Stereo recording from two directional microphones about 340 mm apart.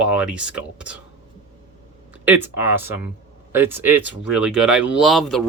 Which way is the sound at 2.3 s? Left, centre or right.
Centre.